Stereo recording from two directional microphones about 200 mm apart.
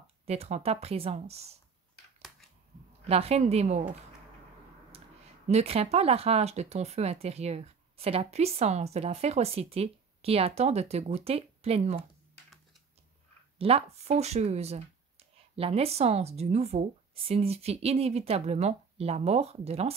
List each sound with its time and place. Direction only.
0.0 s speech: 30° right (ahead or behind)
3.1 s speech: 30° right (ahead or behind)
5.5 s speech: 30° right (ahead or behind)
13.6 s speech: 30° right (ahead or behind)